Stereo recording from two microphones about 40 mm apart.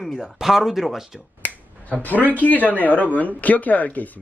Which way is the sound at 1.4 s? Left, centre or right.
Left.